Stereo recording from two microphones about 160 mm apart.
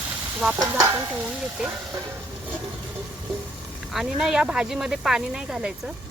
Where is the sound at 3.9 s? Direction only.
Centre (ahead or behind).